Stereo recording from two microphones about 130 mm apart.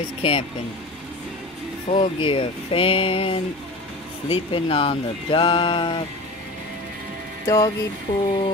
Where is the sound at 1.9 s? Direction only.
80° left.